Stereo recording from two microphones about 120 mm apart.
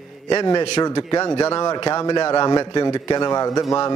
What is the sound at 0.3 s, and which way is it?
A man's voice, 40° left (ahead or behind).